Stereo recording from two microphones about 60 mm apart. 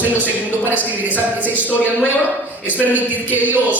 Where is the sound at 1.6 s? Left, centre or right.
Left.